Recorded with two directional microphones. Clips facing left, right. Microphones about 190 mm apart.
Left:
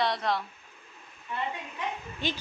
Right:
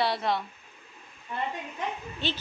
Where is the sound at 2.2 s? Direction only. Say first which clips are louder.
Even; 10° left (ahead or behind).